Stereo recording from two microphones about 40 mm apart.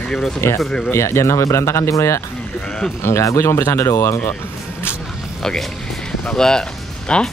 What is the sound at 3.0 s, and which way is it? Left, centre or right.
Speech, left.